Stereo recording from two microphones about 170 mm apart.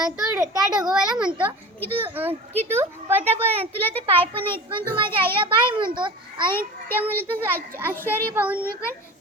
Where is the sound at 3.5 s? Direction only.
35° right (ahead or behind).